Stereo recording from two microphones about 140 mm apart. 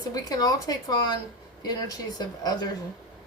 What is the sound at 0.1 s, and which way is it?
A woman's voice, 25° left (ahead or behind).